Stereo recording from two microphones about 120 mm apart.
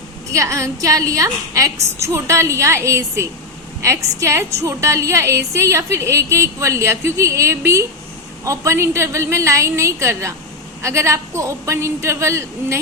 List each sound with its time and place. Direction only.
0.3 s a woman's voice: 25° right (ahead or behind)